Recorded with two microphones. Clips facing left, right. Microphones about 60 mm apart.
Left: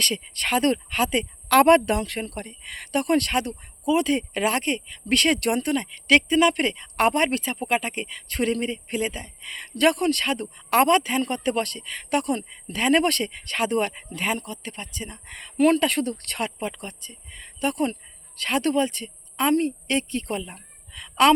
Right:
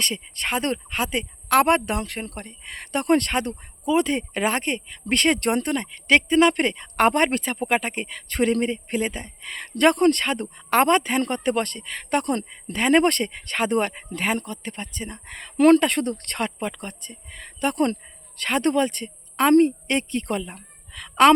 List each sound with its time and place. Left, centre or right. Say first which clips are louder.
0.0 s speech: left 1 dB; right
12.7 s speech: right 2 dB; right
18.3 s a woman's voice: right 1 dB; right